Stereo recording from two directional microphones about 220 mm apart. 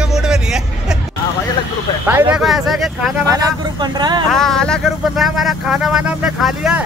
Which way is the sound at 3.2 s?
15° right (ahead or behind).